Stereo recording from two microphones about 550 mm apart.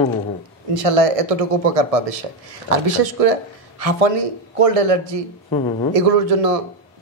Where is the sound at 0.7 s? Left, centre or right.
Right.